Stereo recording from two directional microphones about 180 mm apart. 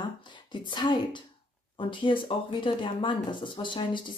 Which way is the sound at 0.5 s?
25° left (ahead or behind).